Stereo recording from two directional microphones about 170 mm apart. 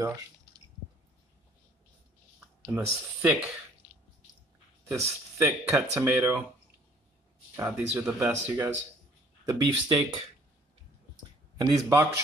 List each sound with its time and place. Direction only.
2.7 s speech: 5° right (ahead or behind)
4.8 s speech: 15° right (ahead or behind)
7.5 s speech: 10° right (ahead or behind)
9.5 s speech: 25° right (ahead or behind)
11.6 s speech: 10° right (ahead or behind)